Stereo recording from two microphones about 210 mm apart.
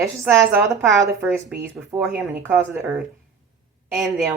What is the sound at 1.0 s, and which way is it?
Speech, 10° right (ahead or behind).